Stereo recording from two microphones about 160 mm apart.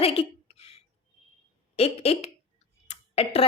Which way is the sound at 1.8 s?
40° left (ahead or behind).